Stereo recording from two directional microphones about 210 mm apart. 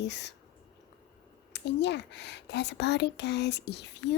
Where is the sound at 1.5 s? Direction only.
55° left (ahead or behind).